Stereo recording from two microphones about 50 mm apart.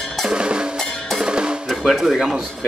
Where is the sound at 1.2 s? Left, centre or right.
Centre.